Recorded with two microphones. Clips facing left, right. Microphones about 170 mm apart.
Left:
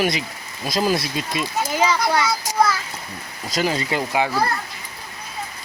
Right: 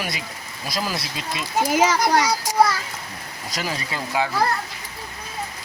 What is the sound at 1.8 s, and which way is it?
Speech, 45° right (ahead or behind).